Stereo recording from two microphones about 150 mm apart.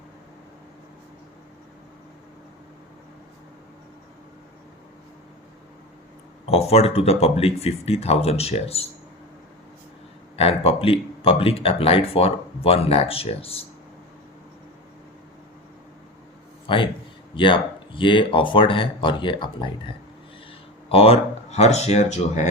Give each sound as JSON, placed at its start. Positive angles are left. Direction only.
{"t": 6.5, "sound": "speech", "side_deg": 40}
{"t": 10.3, "sound": "speech", "side_deg": 40}
{"t": 16.6, "sound": "speech", "side_deg": 35}
{"t": 20.9, "sound": "speech", "side_deg": 40}